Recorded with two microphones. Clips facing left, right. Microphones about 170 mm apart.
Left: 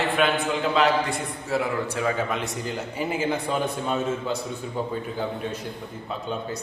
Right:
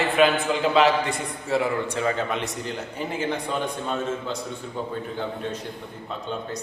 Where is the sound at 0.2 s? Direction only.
Centre (ahead or behind).